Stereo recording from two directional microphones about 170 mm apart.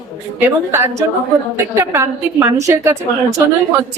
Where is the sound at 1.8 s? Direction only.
15° right (ahead or behind).